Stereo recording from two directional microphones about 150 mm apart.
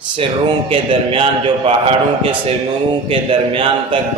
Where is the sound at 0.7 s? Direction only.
35° right (ahead or behind).